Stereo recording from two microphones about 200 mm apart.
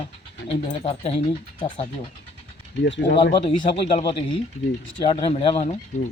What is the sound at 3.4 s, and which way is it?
Speech, 25° left (ahead or behind).